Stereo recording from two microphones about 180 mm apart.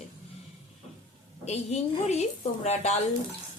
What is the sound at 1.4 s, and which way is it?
Speech, 35° left (ahead or behind).